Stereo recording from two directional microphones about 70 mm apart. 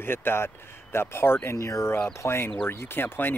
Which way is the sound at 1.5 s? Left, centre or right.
Left.